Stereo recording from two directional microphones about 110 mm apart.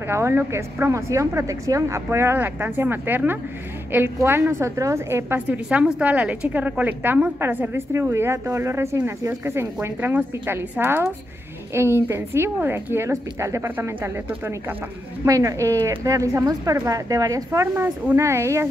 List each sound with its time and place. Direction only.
0.1 s a woman's voice: 20° right (ahead or behind)
5.7 s a woman's voice: 10° right (ahead or behind)